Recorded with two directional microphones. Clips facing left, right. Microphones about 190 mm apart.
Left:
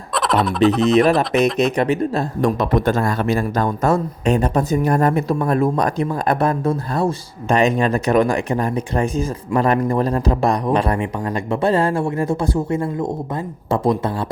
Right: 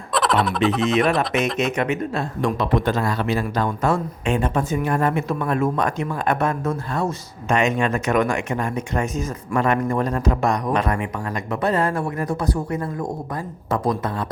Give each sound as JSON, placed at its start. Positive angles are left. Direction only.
{"t": 0.1, "sound": "fowl", "side_deg": 0}
{"t": 0.9, "sound": "speech", "side_deg": 35}